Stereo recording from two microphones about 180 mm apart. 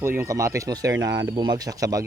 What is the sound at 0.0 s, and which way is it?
Speech, 15° right (ahead or behind).